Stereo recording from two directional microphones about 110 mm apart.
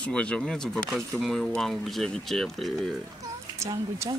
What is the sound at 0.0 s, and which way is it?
Speech, 10° left (ahead or behind).